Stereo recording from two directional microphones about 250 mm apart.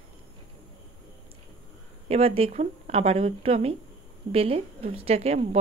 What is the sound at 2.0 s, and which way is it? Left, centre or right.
A woman's voice, right.